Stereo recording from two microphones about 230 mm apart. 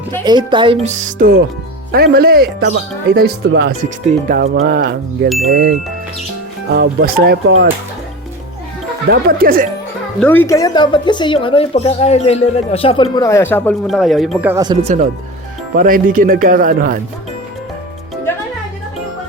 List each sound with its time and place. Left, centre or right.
0.3 s speech: centre; by 5.7 s right
6.7 s speech: right
9.0 s speech: right
10.2 s speech: centre
14.4 s speech: centre
15.7 s speech: right